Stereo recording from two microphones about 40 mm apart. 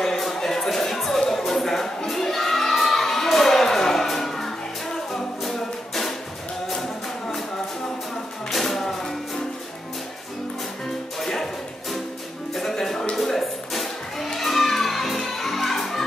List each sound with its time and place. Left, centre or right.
0.0 s music: centre
1.3 s a sound: centre
7.2 s a sound: centre
8.5 s music: centre
11.1 s music: centre
12.5 s music: centre